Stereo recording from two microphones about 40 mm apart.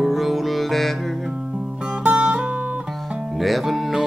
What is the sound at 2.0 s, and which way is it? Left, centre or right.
Music, right.